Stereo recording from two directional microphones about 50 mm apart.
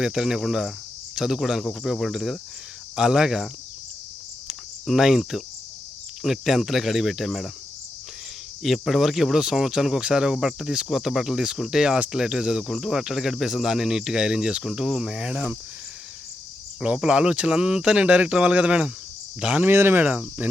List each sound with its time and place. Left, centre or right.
0.0 s speech: centre
4.9 s speech: centre
8.6 s speech: centre
16.8 s speech: centre
19.6 s speech: right
20.0 s speech: right